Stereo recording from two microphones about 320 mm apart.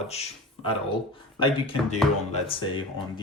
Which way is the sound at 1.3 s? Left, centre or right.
Centre.